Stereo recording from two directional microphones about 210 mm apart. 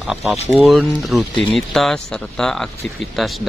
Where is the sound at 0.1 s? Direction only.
Centre (ahead or behind).